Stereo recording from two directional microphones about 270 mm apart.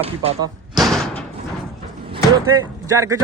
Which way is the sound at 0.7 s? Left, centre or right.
Centre.